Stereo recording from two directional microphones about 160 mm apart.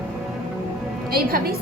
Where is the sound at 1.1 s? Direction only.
70° right (ahead or behind).